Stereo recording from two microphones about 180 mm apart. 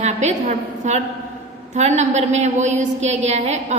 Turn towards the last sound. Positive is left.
turn(degrees=-40)  # may be behind; listen again after turning